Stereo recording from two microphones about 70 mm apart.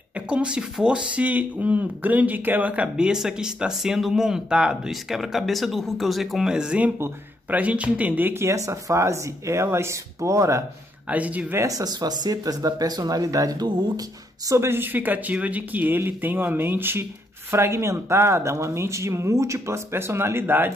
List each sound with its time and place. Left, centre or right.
0.3 s speech: centre
3.1 s speech: centre; by 8.4 s right
8.4 s speech: right
11.1 s speech: right
11.6 s speech: right
14.5 s speech: right